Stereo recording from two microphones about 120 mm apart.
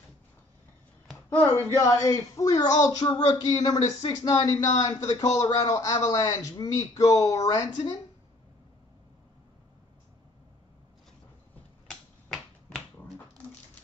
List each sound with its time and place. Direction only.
1.4 s a woman's voice: 20° left (ahead or behind)
11.9 s finger snapping: 5° left (ahead or behind)